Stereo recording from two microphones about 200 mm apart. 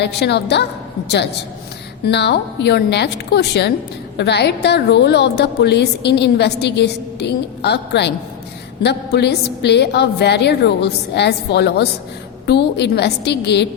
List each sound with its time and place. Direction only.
0.0 s a woman's voice: 55° left (ahead or behind)